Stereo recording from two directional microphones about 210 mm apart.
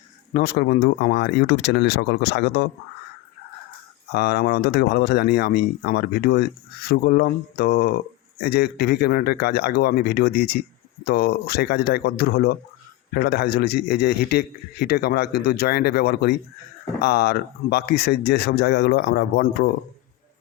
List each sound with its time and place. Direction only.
0.3 s speech: 45° left (ahead or behind)
4.1 s speech: 50° left (ahead or behind)